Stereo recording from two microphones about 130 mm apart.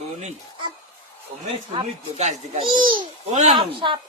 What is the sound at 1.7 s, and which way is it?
Speech, 60° right (ahead or behind).